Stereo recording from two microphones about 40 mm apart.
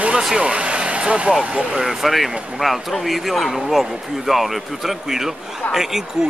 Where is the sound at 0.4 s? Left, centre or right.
Right.